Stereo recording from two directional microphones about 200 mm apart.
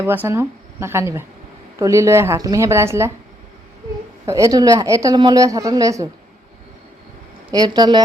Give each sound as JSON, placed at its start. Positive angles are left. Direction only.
{"t": 0.0, "sound": "a woman's voice", "side_deg": -10}
{"t": 4.3, "sound": "a woman's voice", "side_deg": -15}
{"t": 7.5, "sound": "speech", "side_deg": -20}